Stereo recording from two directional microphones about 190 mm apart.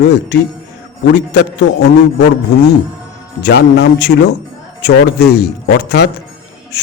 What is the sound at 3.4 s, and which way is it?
Speech, 60° left (ahead or behind).